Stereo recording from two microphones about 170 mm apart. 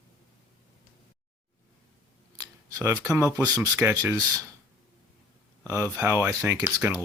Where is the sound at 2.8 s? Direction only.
15° right (ahead or behind).